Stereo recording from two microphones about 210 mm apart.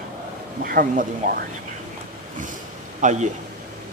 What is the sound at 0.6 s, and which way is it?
Speech, 40° right (ahead or behind).